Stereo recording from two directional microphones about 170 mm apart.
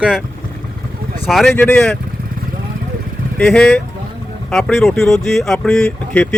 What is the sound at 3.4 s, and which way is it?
Speech, 5° left (ahead or behind).